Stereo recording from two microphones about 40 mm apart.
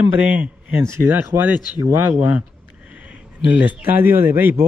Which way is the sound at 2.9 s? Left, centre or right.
Right.